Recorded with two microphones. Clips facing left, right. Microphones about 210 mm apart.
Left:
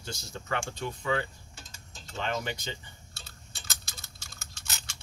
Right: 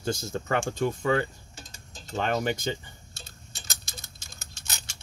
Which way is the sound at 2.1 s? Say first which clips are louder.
Right 6 dB; 45° right (ahead or behind).